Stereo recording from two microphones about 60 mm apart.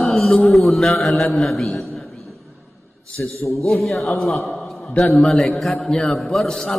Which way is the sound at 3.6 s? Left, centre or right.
Centre.